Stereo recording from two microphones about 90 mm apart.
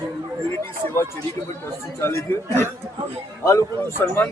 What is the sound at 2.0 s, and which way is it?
A man's voice, 25° left (ahead or behind).